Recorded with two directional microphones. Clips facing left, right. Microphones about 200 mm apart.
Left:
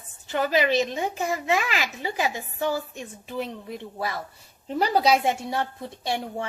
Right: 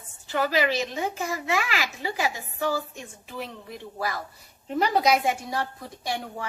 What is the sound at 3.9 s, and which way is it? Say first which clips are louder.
A woman's voice: right 2 dB; 25° left (ahead or behind).